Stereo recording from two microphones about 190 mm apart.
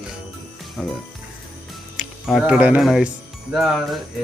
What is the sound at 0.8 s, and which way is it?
Speech, 5° right (ahead or behind).